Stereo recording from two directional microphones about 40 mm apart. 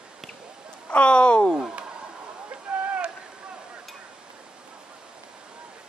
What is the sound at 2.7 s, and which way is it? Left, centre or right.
Rowboat, right.